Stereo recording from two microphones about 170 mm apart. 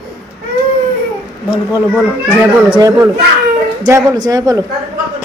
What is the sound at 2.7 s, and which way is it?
Speech, 20° right (ahead or behind).